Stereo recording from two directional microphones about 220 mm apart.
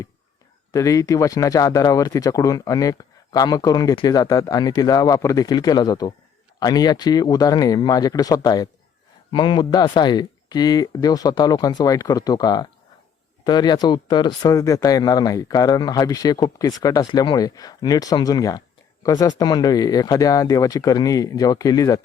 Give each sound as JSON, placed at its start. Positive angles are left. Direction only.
{"t": 0.7, "sound": "speech", "side_deg": 15}